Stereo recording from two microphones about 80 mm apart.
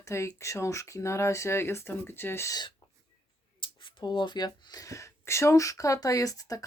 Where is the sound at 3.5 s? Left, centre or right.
Left.